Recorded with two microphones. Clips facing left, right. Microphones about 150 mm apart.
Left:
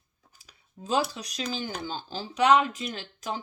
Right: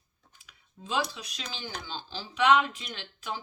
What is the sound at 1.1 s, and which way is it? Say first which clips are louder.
Speech: left 8 dB; 40° left (ahead or behind).